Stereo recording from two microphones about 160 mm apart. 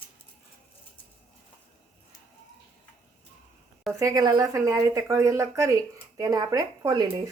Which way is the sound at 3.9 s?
20° right (ahead or behind).